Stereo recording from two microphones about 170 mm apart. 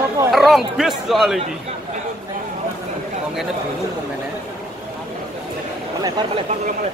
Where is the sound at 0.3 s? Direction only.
Centre (ahead or behind).